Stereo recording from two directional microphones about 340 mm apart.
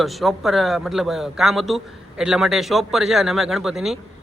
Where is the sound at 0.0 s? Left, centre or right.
Centre.